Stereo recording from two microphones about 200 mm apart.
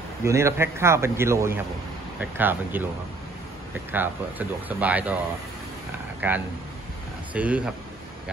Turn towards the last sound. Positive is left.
turn(degrees=-5)  # may be behind; listen again after turning